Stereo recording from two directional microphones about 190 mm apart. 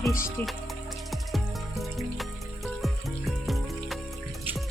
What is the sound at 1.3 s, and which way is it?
Music, centre (ahead or behind).